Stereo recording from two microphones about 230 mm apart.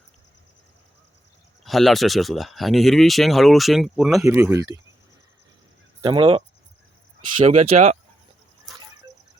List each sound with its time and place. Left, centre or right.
1.6 s speech: centre
6.0 s speech: right